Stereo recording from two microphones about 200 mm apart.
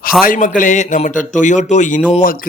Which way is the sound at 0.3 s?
40° left (ahead or behind).